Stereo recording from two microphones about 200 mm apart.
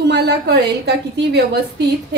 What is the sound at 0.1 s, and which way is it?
A woman's voice, 55° right (ahead or behind).